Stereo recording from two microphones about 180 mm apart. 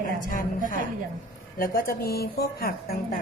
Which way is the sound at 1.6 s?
55° left (ahead or behind).